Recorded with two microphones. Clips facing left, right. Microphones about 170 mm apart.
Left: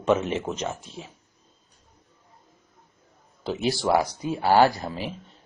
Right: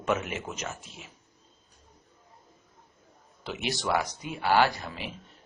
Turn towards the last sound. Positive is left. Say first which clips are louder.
# left 6 dB
turn(degrees=35)  # may be behind; listen again after turning